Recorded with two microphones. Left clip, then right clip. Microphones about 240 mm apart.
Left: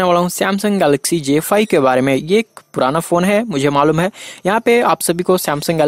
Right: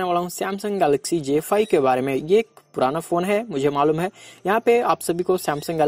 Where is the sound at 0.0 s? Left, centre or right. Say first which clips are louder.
Left 9 dB; left.